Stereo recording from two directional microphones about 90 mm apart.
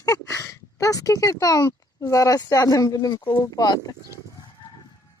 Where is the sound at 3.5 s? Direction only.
50° left (ahead or behind).